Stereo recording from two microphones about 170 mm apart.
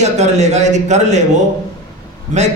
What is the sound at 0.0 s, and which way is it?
A man's voice, 40° right (ahead or behind).